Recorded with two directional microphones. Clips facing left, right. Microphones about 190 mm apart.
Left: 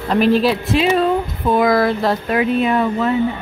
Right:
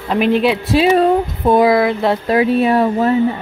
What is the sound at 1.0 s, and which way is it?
Speech, 40° right (ahead or behind).